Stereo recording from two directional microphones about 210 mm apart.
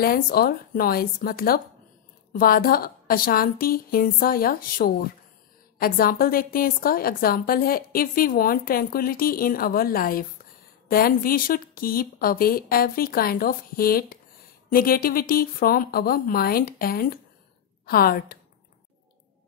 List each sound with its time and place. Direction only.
0.0 s a woman's voice: 45° left (ahead or behind)